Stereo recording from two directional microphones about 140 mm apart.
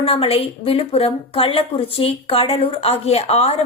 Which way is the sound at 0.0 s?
45° left (ahead or behind).